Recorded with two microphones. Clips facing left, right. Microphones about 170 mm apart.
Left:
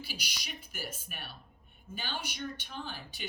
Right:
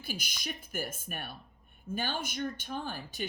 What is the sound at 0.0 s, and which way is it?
Speech, 50° right (ahead or behind).